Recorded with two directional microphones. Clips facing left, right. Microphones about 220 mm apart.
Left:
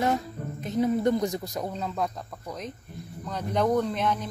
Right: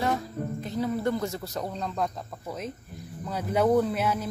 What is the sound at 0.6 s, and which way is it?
Speech, 20° left (ahead or behind).